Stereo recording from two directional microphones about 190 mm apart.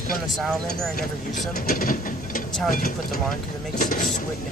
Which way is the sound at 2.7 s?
50° left (ahead or behind).